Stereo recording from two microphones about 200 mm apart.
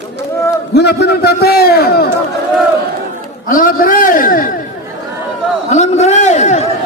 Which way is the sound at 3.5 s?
45° left (ahead or behind).